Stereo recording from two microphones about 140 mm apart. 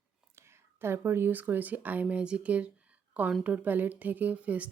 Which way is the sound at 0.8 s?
15° right (ahead or behind).